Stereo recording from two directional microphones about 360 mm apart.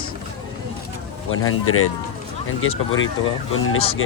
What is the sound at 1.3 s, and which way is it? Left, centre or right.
Speech, left.